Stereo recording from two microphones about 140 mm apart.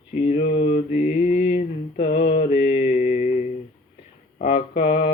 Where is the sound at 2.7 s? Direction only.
65° left (ahead or behind).